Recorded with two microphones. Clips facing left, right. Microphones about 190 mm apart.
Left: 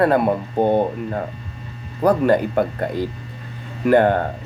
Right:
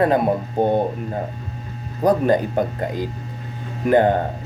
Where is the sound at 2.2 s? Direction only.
15° right (ahead or behind).